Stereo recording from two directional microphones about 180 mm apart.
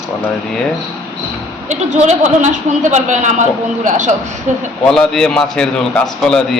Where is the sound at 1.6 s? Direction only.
40° right (ahead or behind).